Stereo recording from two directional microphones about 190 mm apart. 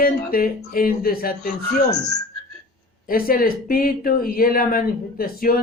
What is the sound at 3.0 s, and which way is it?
Speech, 50° left (ahead or behind).